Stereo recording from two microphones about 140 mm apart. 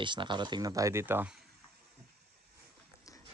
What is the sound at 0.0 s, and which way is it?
Speech, 35° right (ahead or behind).